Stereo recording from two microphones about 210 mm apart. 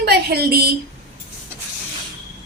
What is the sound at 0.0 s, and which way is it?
Speech, 50° right (ahead or behind).